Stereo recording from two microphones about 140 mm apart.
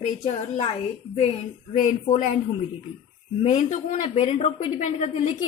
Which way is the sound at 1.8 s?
60° left (ahead or behind).